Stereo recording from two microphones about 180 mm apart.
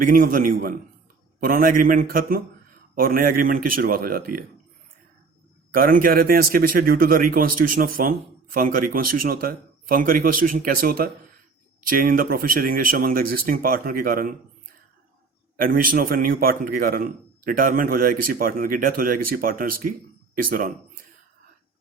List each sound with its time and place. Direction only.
0.0 s a man's voice: 50° right (ahead or behind)
5.7 s a man's voice: 50° right (ahead or behind)
15.5 s a man's voice: 50° right (ahead or behind)